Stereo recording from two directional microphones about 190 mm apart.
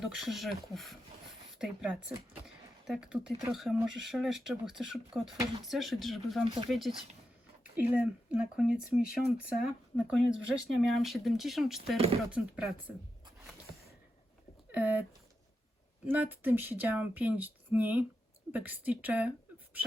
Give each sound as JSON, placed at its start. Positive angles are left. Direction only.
{"t": 0.0, "sound": "speech", "side_deg": 0}
{"t": 6.4, "sound": "speech", "side_deg": -25}
{"t": 6.7, "sound": "speech", "side_deg": 0}
{"t": 14.7, "sound": "speech", "side_deg": -10}
{"t": 16.0, "sound": "speech", "side_deg": -10}